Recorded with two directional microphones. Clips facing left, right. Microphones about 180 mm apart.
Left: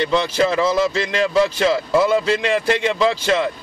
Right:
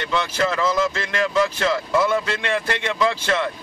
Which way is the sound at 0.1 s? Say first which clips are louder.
Left 5 dB; 30° left (ahead or behind).